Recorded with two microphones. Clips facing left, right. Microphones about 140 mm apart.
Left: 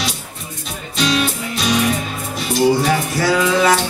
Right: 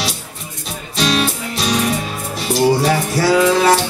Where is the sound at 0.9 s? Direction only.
35° right (ahead or behind).